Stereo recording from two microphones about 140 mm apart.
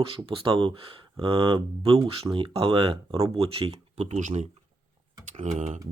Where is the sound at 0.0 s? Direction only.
40° right (ahead or behind).